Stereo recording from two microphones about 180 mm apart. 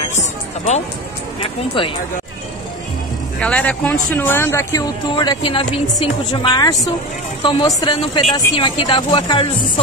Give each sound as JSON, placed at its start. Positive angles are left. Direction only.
{"t": 0.1, "sound": "music", "side_deg": 40}
{"t": 1.8, "sound": "speech", "side_deg": 30}
{"t": 3.3, "sound": "speech", "side_deg": 5}
{"t": 5.1, "sound": "speech", "side_deg": 25}